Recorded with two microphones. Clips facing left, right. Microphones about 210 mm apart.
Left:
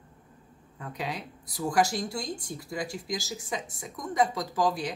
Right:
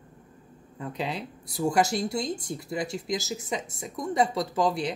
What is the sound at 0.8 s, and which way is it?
Speech, 25° right (ahead or behind).